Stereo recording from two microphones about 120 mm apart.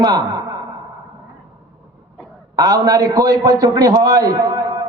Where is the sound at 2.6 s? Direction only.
30° right (ahead or behind).